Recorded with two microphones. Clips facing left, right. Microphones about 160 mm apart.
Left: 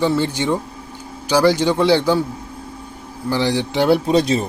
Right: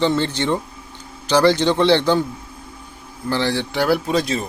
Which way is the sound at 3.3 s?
15° left (ahead or behind).